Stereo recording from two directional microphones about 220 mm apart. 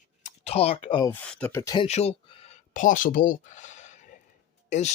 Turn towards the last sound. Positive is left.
turn(degrees=30)  # may be behind; listen again after turning